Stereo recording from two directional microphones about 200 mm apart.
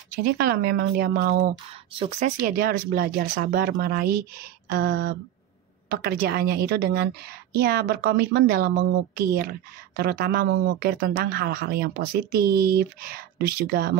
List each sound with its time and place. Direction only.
0.2 s speech: 50° right (ahead or behind)
2.0 s speech: 35° right (ahead or behind); by 13.9 s 50° right (ahead or behind)